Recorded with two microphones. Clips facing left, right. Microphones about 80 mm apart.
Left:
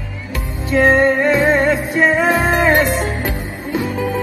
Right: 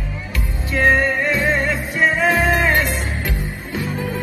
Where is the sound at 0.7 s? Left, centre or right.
Left.